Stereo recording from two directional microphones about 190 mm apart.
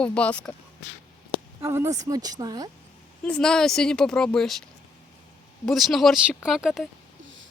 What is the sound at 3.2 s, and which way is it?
Speech, 5° left (ahead or behind).